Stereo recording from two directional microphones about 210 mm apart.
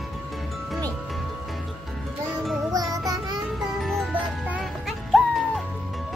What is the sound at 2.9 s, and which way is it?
Child singing, 15° right (ahead or behind).